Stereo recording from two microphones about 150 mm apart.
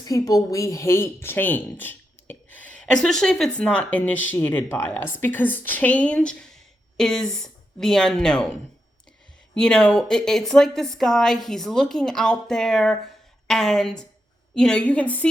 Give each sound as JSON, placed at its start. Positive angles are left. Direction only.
{"t": 0.0, "sound": "a woman's voice", "side_deg": 25}
{"t": 9.6, "sound": "a woman's voice", "side_deg": 5}